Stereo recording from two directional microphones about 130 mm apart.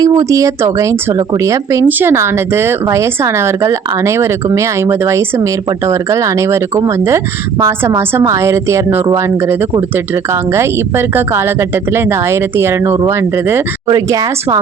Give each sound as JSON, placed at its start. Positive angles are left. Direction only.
{"t": 0.0, "sound": "speech", "side_deg": -25}
{"t": 13.8, "sound": "speech", "side_deg": -30}